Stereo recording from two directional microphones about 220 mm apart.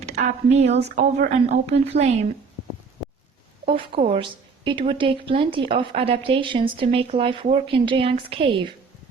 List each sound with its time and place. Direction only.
0.0 s speech: 30° right (ahead or behind)
3.7 s a woman's voice: 25° right (ahead or behind)